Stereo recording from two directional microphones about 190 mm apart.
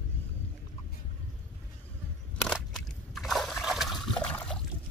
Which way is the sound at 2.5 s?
Centre (ahead or behind).